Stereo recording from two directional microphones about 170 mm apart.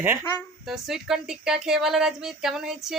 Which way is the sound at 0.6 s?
Centre (ahead or behind).